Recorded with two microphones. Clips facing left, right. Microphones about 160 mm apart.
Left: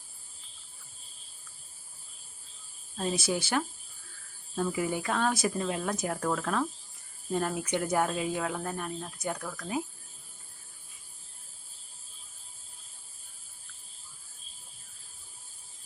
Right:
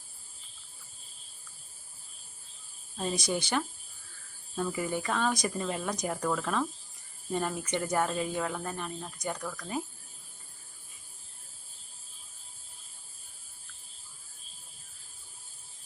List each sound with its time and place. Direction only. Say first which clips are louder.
3.0 s speech: left 1 dB; 5° left (ahead or behind)